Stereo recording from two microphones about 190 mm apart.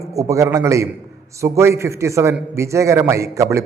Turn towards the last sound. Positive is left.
turn(degrees=-15)  # may be behind; listen again after turning